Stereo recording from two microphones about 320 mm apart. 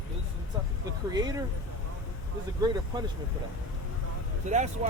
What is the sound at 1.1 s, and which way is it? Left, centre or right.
Speech, centre.